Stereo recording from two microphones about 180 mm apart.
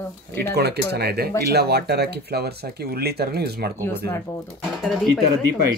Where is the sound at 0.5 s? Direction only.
65° right (ahead or behind).